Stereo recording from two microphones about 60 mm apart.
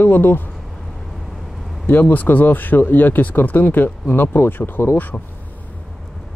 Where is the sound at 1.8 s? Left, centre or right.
Left.